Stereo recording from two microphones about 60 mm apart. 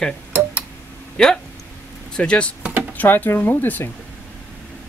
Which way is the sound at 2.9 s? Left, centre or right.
Left.